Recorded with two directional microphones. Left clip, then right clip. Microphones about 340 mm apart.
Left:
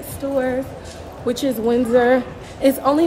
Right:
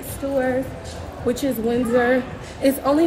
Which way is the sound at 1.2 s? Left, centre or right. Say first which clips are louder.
Left 2 dB; centre.